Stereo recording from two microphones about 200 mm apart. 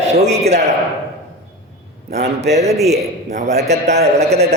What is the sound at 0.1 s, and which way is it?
Speech, 35° right (ahead or behind).